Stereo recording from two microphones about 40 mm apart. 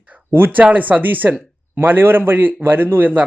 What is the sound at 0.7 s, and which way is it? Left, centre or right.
A man's voice, right.